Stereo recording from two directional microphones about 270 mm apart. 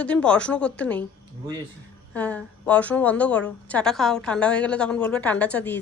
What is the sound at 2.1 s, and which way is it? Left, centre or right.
A woman's voice, centre.